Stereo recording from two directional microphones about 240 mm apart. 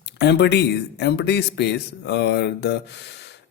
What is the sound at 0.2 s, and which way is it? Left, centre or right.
Speech, left.